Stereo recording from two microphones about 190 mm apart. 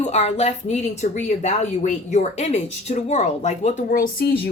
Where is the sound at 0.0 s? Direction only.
35° left (ahead or behind).